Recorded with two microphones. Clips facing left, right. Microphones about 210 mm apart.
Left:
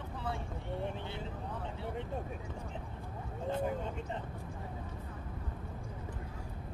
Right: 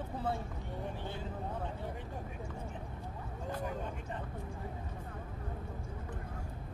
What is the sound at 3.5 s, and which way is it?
Speech, 25° left (ahead or behind).